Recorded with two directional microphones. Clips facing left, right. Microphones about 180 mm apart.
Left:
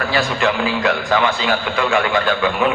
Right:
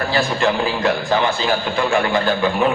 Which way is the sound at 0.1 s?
30° right (ahead or behind).